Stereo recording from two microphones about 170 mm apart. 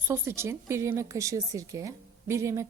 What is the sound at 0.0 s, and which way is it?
Speech, 15° right (ahead or behind).